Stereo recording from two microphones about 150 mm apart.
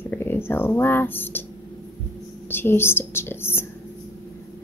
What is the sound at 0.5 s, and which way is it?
Speech, 15° left (ahead or behind).